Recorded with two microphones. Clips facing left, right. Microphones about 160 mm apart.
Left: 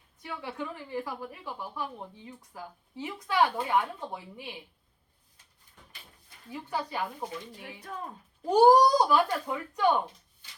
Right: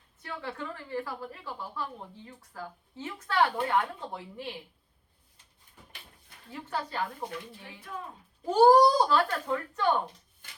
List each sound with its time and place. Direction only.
0.2 s a woman's voice: 15° left (ahead or behind)
6.5 s a woman's voice: 15° left (ahead or behind)
7.9 s speech: 45° left (ahead or behind)
8.4 s a woman's voice: 15° left (ahead or behind)